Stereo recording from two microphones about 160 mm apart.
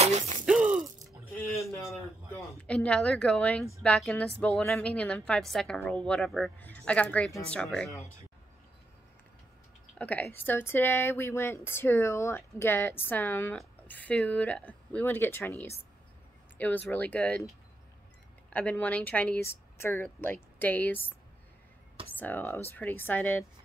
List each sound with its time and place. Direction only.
0.0 s gasp: 45° right (ahead or behind)
0.5 s mechanisms: 5° right (ahead or behind)
1.5 s a sound: 15° left (ahead or behind)
2.6 s a woman's voice: 5° left (ahead or behind)
9.9 s speech: 10° left (ahead or behind)
18.5 s speech: 10° left (ahead or behind)
22.1 s speech: 10° left (ahead or behind)